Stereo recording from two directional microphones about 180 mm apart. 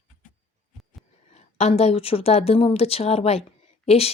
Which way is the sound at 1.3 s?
35° left (ahead or behind).